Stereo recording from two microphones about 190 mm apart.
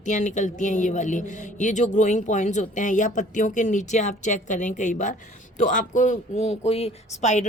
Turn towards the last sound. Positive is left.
turn(degrees=40)  # may be behind; listen again after turning